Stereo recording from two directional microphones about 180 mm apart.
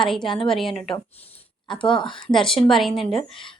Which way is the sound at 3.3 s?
30° left (ahead or behind).